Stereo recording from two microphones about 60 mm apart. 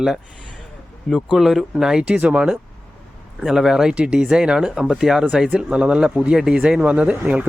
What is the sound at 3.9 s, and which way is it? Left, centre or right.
Speech, centre.